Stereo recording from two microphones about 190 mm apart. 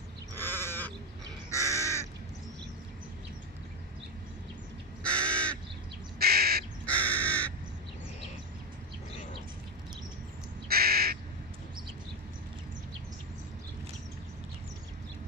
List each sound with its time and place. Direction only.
0.3 s sheep: 10° left (ahead or behind)
1.5 s crow: 15° left (ahead or behind)
5.0 s crow: 5° left (ahead or behind)
6.1 s crow: 55° right (ahead or behind)
6.9 s crow: 10° left (ahead or behind)
10.7 s crow: 55° right (ahead or behind)